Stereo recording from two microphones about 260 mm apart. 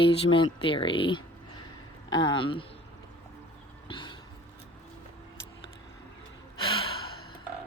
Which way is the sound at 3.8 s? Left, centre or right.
Centre.